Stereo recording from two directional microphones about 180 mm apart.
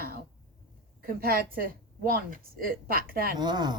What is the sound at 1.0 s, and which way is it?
Speech, 55° right (ahead or behind).